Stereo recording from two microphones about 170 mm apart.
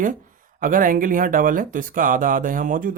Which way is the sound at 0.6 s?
55° right (ahead or behind).